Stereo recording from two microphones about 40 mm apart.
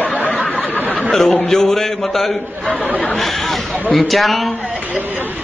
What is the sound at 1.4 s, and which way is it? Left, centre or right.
A man's voice, centre.